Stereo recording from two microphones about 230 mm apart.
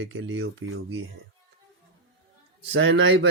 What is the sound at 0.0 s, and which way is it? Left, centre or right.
Speech, right.